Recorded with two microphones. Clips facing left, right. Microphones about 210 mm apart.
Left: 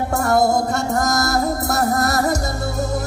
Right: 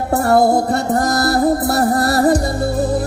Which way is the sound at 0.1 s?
35° right (ahead or behind).